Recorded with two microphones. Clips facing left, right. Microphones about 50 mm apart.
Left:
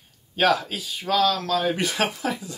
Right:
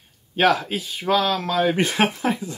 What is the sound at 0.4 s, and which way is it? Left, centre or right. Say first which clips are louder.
Speech: right 2 dB; right.